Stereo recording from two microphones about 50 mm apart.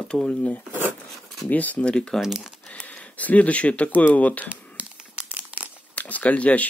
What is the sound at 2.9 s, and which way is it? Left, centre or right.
Speech, left.